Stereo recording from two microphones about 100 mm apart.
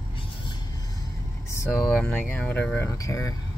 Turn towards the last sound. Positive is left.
turn(degrees=35)  # may be behind; listen again after turning